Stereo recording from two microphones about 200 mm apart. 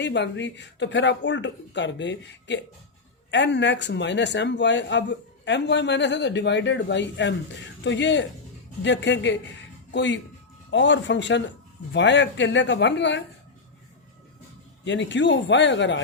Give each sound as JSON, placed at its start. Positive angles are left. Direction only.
{"t": 0.0, "sound": "speech", "side_deg": 65}
{"t": 14.8, "sound": "speech", "side_deg": 65}